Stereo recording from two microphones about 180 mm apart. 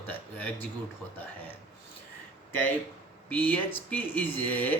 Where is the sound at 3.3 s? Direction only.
10° left (ahead or behind).